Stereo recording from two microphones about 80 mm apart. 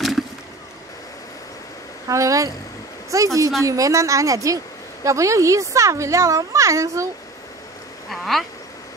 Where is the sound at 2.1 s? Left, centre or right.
Right.